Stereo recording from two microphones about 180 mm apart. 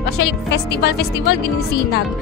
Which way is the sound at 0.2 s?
65° left (ahead or behind).